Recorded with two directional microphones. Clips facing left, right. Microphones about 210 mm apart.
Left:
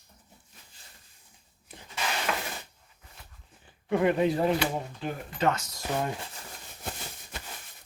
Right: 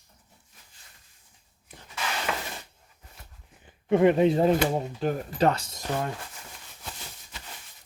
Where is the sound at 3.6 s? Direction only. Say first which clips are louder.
Right 5 dB; 25° right (ahead or behind).